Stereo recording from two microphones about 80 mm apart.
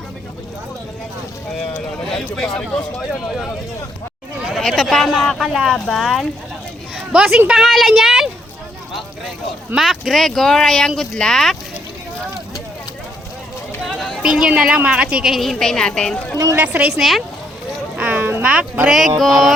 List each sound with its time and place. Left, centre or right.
2.0 s speech: centre
3.1 s speech: centre
4.7 s speech: centre
6.9 s speech: centre
7.5 s speech: centre
9.7 s speech: centre
14.2 s speech: centre
16.6 s speech: centre
17.0 s speech: centre
17.9 s boat: centre
18.4 s speech: centre
19.2 s speech: centre